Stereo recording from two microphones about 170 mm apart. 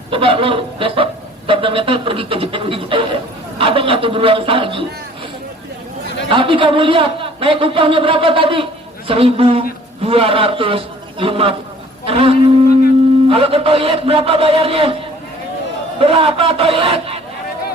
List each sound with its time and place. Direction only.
0.1 s a man's voice: 30° right (ahead or behind)
6.2 s a man's voice: 30° right (ahead or behind)
16.0 s a man's voice: 35° right (ahead or behind)